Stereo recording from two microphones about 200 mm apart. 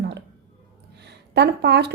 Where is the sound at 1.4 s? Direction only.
55° right (ahead or behind).